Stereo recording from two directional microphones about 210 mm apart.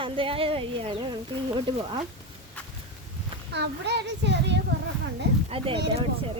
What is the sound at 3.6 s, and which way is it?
Speech, 55° right (ahead or behind).